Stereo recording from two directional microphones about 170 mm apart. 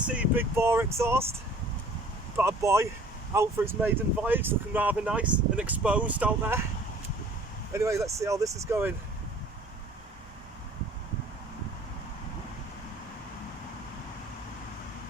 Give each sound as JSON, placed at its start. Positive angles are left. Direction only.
{"t": 0.1, "sound": "speech", "side_deg": -10}
{"t": 2.4, "sound": "speech", "side_deg": -15}
{"t": 7.7, "sound": "speech", "side_deg": -15}